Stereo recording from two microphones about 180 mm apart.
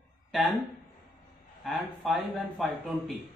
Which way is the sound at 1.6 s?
Centre (ahead or behind).